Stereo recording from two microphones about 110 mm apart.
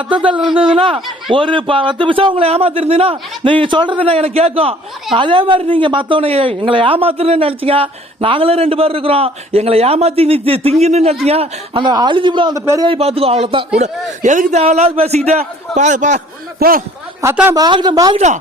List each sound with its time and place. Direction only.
0.1 s a man's voice: 50° right (ahead or behind)
5.1 s speech: 50° right (ahead or behind); by 11.2 s 80° right
11.3 s speech: 65° right (ahead or behind)
11.8 s a man's voice: 45° right (ahead or behind)
12.5 s a man's voice: 30° right (ahead or behind)
12.9 s speech: 65° right (ahead or behind)
14.3 s a man's voice: 90° right
17.5 s speech: 40° right (ahead or behind)